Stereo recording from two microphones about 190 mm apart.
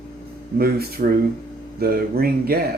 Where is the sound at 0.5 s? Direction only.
50° right (ahead or behind).